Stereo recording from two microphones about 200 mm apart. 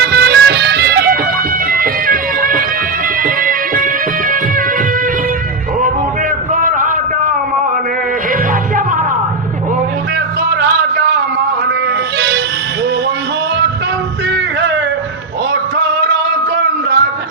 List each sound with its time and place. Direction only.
0.1 s music: 55° right (ahead or behind)
1.7 s bagpipes: 45° right (ahead or behind)
3.2 s music: 45° right (ahead or behind)
6.5 s a sound: 40° right (ahead or behind)